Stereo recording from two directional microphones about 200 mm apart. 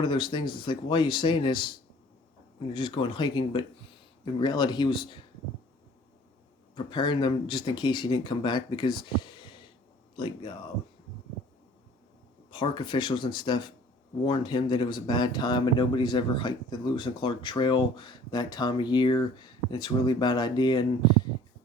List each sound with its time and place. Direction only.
0.0 s speech: 25° left (ahead or behind)
2.7 s speech: 25° left (ahead or behind)
6.7 s speech: 25° left (ahead or behind)
12.5 s speech: 25° left (ahead or behind)